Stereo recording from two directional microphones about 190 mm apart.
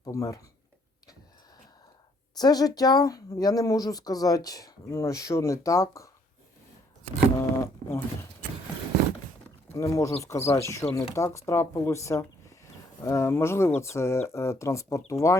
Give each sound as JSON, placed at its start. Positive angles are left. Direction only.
{"t": 0.0, "sound": "speech", "side_deg": 15}
{"t": 2.3, "sound": "speech", "side_deg": 20}
{"t": 7.3, "sound": "speech", "side_deg": 15}
{"t": 9.7, "sound": "speech", "side_deg": 15}